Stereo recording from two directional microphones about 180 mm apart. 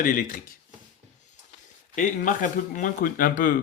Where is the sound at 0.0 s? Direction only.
50° left (ahead or behind).